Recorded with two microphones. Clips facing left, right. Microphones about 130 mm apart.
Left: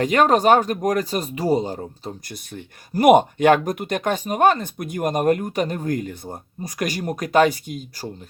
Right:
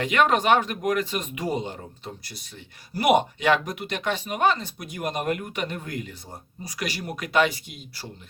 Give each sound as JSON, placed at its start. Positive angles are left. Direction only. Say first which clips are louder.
{"t": 0.0, "sound": "speech", "louder": "left 5 dB", "side_deg": 40}
{"t": 2.2, "sound": "speech", "louder": "left 8 dB", "side_deg": 50}